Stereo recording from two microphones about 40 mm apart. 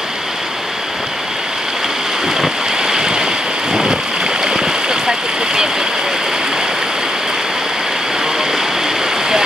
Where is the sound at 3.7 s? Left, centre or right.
Centre.